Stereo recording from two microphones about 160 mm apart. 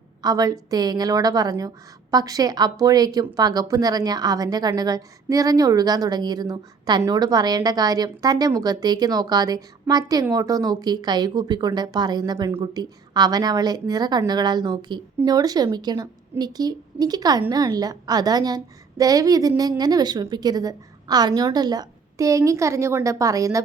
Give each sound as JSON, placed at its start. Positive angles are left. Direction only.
{"t": 0.2, "sound": "a woman's voice", "side_deg": -25}